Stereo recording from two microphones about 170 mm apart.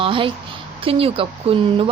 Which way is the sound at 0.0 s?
30° right (ahead or behind).